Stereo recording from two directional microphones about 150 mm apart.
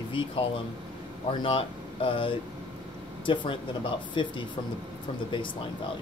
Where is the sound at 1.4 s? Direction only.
35° left (ahead or behind).